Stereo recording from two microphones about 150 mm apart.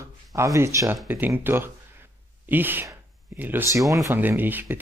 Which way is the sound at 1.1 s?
15° right (ahead or behind).